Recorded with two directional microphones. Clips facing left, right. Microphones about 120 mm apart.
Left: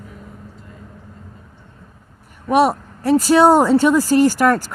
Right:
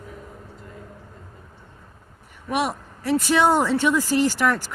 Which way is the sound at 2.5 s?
40° left (ahead or behind).